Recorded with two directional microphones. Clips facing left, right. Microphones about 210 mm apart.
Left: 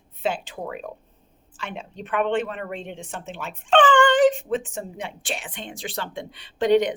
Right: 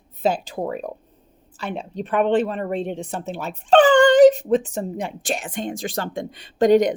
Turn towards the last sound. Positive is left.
turn(degrees=-45)  # may be behind; listen again after turning